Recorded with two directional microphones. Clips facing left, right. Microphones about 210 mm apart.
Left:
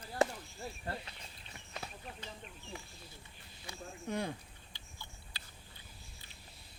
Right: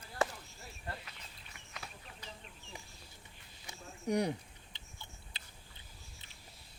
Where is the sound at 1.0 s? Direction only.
30° left (ahead or behind).